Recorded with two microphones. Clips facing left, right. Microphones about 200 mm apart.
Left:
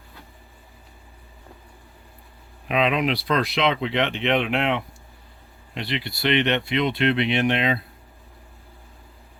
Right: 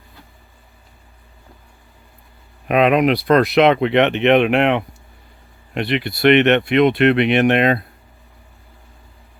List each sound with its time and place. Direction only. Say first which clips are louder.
2.6 s speech: right 8 dB; 55° right (ahead or behind)